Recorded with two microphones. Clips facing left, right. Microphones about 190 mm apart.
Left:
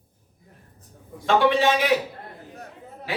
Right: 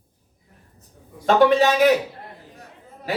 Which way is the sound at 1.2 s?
40° right (ahead or behind).